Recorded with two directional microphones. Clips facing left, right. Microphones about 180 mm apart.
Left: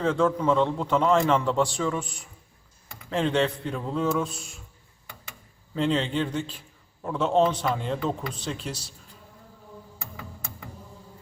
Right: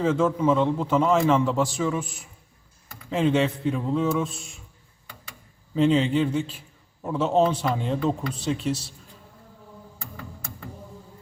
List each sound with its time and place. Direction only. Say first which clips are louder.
0.0 s a man's voice: right 2 dB; 5° right (ahead or behind)
5.7 s a man's voice: right 5 dB; 5° right (ahead or behind)